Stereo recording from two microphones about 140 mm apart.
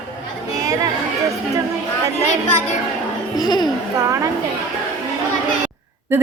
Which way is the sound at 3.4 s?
30° left (ahead or behind).